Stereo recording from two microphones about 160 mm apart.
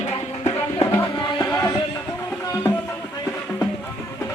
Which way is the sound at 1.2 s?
25° left (ahead or behind).